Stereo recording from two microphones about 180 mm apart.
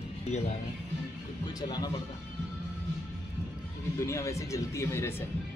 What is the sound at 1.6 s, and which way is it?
Speech, 20° left (ahead or behind).